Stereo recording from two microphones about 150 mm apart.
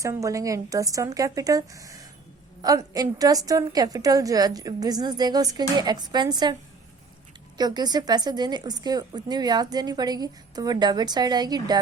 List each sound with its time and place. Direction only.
0.0 s a woman's voice: 20° right (ahead or behind)
7.6 s a woman's voice: 30° right (ahead or behind)